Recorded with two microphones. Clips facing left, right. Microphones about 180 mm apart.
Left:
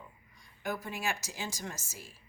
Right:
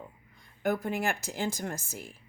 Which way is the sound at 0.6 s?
55° right (ahead or behind).